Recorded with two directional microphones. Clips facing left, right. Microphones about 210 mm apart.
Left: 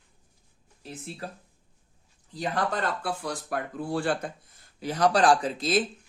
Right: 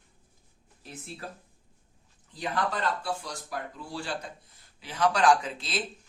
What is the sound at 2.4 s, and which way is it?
Speech, 45° left (ahead or behind).